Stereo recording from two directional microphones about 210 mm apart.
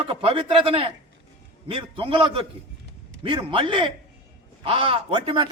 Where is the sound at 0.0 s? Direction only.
25° right (ahead or behind).